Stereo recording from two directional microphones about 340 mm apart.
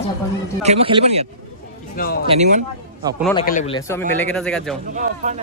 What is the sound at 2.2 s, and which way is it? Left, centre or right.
A man's voice, centre.